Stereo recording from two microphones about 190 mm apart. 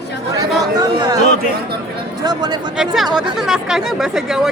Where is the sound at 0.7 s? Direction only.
20° right (ahead or behind).